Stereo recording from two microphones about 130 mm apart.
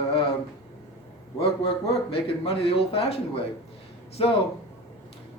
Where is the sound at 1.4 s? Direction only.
45° left (ahead or behind).